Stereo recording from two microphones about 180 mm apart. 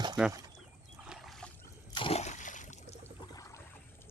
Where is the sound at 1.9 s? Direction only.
30° left (ahead or behind).